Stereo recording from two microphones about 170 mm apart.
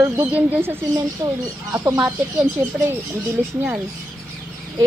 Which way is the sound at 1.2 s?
25° right (ahead or behind).